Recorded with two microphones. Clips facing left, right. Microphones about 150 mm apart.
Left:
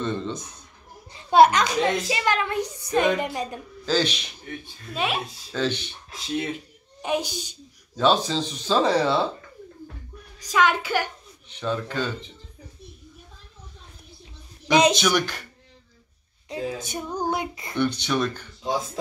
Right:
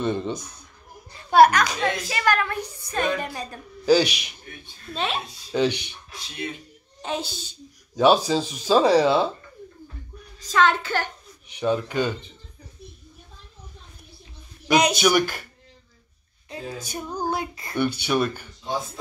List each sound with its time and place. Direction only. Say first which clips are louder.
0.0 s speech: right 3 dB; 15° right (ahead or behind)
1.1 s a woman's voice: even; 20° left (ahead or behind)
3.8 s speech: right 6 dB; 10° right (ahead or behind)
4.9 s a woman's voice: left 1 dB; 10° left (ahead or behind)
5.5 s speech: right 4 dB; 15° right (ahead or behind)
7.0 s a woman's voice: left 3 dB; 15° left (ahead or behind)
7.9 s speech: right 3 dB; 10° right (ahead or behind)
10.4 s a woman's voice: right 1 dB; 10° left (ahead or behind)
11.4 s speech: right 4 dB; 15° right (ahead or behind)
15.0 s speech: right 3 dB; 5° right (ahead or behind)
16.4 s a woman's voice: left 4 dB; 20° left (ahead or behind)
17.7 s speech: right 1 dB; 10° right (ahead or behind)